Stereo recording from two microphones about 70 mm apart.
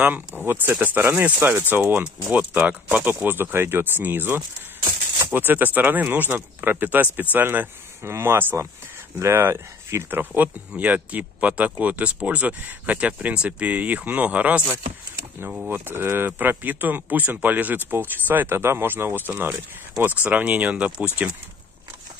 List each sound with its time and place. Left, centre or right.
0.0 s speech: centre
0.4 s speech: right
10.0 s speech: right
15.7 s speech: right